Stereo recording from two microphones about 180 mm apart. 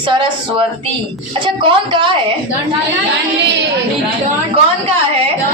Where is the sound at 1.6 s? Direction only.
25° right (ahead or behind).